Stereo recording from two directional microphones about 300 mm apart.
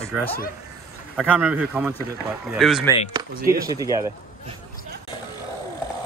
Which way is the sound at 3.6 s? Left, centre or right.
Centre.